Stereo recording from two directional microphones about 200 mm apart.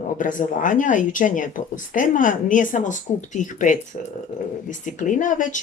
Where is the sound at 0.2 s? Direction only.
40° left (ahead or behind).